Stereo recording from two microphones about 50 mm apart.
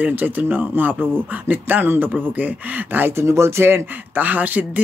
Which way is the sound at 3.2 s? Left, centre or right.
Right.